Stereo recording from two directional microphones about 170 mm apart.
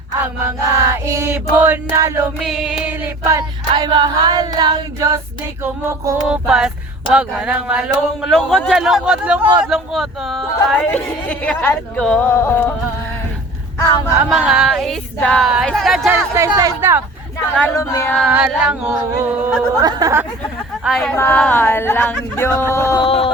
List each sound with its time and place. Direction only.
0.2 s chant: 15° right (ahead or behind)
2.4 s a sound: centre (ahead or behind)
3.2 s music: 15° right (ahead or behind)
3.8 s a capella: 25° right (ahead or behind)
6.2 s speech: 5° right (ahead or behind); by 12.7 s 10° left (ahead or behind)
13.8 s speech: 20° left (ahead or behind)
14.3 s speech: 5° right (ahead or behind)
16.1 s chant: 15° right (ahead or behind)
17.6 s speech: 15° left (ahead or behind)
18.3 s chant: 5° right (ahead or behind)
19.8 s a capella: 20° right (ahead or behind)
20.8 s speech: centre (ahead or behind); by 23.0 s 20° left (ahead or behind)
23.0 s a sound: 35° left (ahead or behind)